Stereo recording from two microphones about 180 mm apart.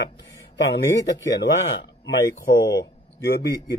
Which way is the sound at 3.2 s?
65° left (ahead or behind).